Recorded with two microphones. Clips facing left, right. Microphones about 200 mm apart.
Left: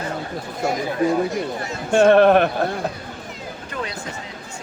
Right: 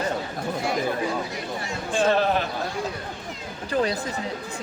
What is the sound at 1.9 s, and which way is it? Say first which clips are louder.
Speech: left 9 dB; 60° left (ahead or behind).